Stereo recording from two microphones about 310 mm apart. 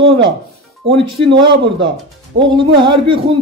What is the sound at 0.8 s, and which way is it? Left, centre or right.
A man's voice, centre.